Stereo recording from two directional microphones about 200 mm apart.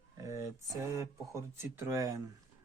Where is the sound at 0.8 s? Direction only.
15° right (ahead or behind).